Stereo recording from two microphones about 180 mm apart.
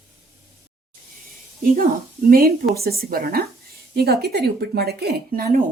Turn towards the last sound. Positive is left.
turn(degrees=-55)  # may be behind; listen again after turning